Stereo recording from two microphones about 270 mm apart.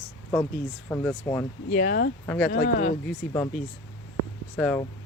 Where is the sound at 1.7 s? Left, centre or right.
Left.